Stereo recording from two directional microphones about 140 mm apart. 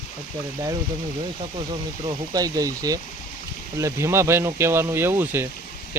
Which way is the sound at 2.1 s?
25° right (ahead or behind).